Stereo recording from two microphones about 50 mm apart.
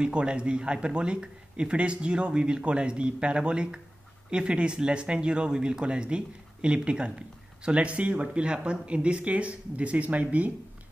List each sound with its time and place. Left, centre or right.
0.0 s speech: centre